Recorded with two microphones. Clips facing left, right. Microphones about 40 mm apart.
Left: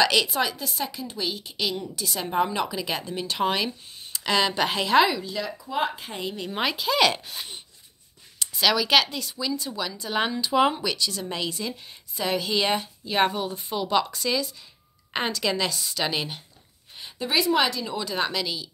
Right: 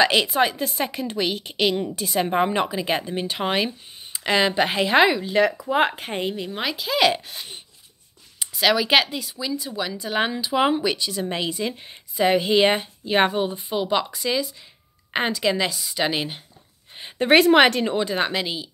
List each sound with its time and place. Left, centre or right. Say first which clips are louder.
0.0 s a woman's voice: right 3 dB; right
5.3 s a woman's voice: right 10 dB; right
6.5 s speech: left 5 dB; centre
8.5 s speech: right 2 dB; centre
16.0 s speech: right 4 dB; centre
17.0 s speech: right 9 dB; right
17.9 s speech: right 4 dB; right